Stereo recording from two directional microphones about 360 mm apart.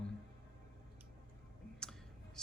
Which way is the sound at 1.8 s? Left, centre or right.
Centre.